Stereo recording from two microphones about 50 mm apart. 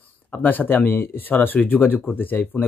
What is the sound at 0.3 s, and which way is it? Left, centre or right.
Speech, left.